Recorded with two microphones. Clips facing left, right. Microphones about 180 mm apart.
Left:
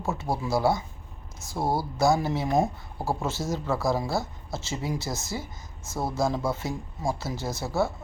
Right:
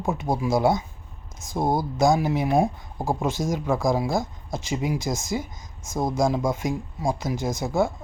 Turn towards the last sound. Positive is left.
turn(degrees=-15)  # may be behind; listen again after turning